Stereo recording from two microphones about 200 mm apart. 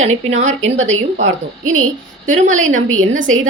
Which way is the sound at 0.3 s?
35° right (ahead or behind).